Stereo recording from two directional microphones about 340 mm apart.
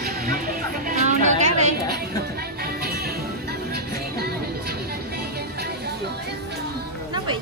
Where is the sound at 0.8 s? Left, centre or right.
Right.